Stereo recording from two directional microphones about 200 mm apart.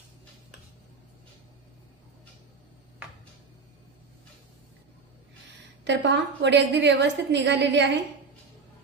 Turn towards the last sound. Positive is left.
turn(degrees=-60)  # may be behind; listen again after turning